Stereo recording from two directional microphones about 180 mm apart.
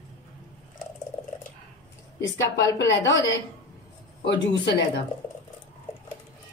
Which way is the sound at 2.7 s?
90° left.